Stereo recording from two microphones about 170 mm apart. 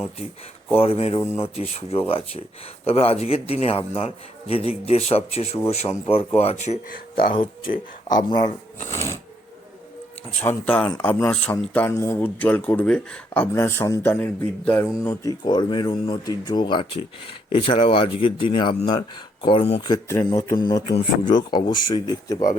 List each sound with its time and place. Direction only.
0.8 s speech: 35° left (ahead or behind); by 7.3 s 55° left (ahead or behind)
8.8 s speech: 15° left (ahead or behind)
10.4 s speech: 10° left (ahead or behind); by 19.8 s 35° left (ahead or behind)
19.8 s speech: 20° left (ahead or behind)